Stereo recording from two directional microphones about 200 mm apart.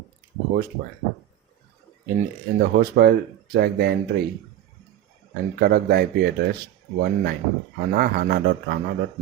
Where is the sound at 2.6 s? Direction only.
50° right (ahead or behind).